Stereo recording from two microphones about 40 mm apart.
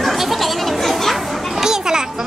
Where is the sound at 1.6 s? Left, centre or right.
Centre.